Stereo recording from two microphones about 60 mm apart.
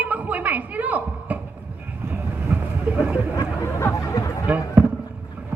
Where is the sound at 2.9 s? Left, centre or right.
Right.